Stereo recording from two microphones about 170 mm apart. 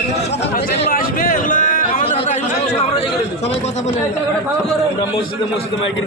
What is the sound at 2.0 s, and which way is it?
Chatter, 40° left (ahead or behind).